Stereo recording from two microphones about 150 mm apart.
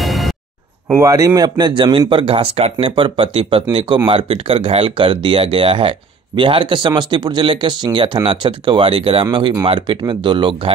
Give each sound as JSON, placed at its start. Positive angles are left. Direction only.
{"t": 0.0, "sound": "music", "side_deg": 0}
{"t": 0.9, "sound": "speech", "side_deg": -20}